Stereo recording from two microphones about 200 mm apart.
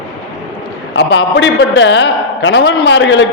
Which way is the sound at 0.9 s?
60° left (ahead or behind).